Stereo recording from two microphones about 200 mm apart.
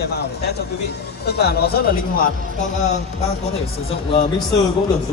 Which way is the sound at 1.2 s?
55° left (ahead or behind).